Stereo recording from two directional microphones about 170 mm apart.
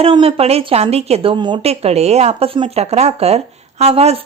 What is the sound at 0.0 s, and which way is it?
A woman's voice, 35° right (ahead or behind).